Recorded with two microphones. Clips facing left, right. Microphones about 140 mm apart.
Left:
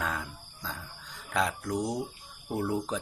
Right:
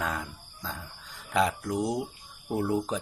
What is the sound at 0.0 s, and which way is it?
Cricket, centre (ahead or behind).